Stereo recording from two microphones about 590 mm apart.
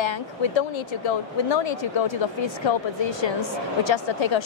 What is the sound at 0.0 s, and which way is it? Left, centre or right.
A woman's voice, left.